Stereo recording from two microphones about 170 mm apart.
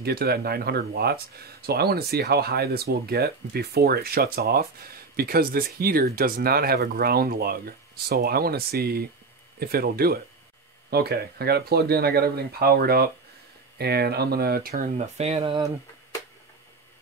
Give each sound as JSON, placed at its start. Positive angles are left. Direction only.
{"t": 0.0, "sound": "speech", "side_deg": -65}
{"t": 15.0, "sound": "speech", "side_deg": -40}